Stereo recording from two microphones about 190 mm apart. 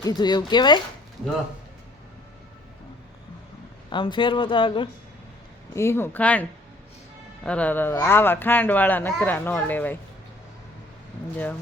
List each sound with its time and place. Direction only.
0.0 s speech: 20° left (ahead or behind)
3.8 s speech: 25° left (ahead or behind)
5.7 s speech: 15° left (ahead or behind)